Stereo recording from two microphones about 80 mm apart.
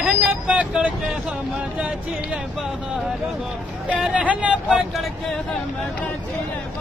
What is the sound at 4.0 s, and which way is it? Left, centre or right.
Music, centre.